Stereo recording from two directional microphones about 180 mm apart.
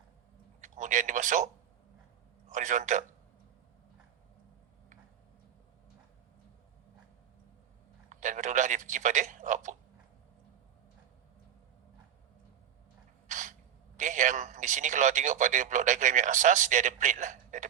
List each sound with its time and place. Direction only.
0.6 s speech: 45° right (ahead or behind)
2.5 s speech: 45° right (ahead or behind)
8.1 s speech: 45° right (ahead or behind)
13.2 s speech: 45° right (ahead or behind)